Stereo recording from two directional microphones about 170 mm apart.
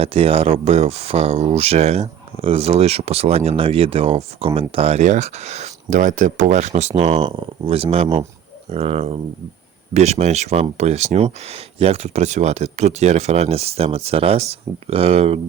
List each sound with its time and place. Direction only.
0.0 s speech: 35° right (ahead or behind)